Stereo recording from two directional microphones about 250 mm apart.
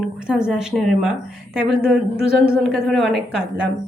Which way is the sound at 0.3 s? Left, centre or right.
Centre.